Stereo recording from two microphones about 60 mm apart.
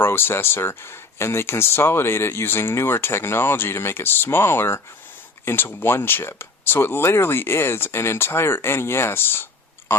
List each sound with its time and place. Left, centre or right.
0.0 s speech: left